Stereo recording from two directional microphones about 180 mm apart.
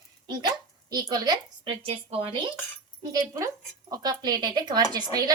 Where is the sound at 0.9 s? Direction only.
20° right (ahead or behind).